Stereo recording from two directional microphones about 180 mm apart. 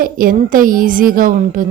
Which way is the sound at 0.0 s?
50° right (ahead or behind).